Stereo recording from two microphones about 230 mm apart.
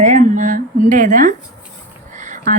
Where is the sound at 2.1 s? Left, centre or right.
Right.